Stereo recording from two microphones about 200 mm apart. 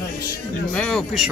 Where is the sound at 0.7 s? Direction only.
5° left (ahead or behind).